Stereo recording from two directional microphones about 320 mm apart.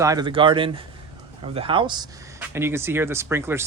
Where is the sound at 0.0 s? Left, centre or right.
Centre.